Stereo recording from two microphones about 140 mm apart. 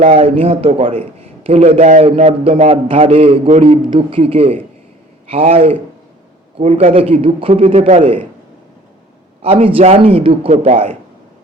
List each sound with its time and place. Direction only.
0.0 s a man's voice: 45° right (ahead or behind)
2.8 s a man's voice: 45° right (ahead or behind)
9.4 s a man's voice: 45° right (ahead or behind)